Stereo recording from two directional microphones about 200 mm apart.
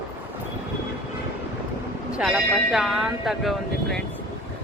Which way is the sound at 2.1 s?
5° right (ahead or behind).